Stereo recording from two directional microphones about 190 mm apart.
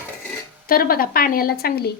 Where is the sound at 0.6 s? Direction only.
50° left (ahead or behind).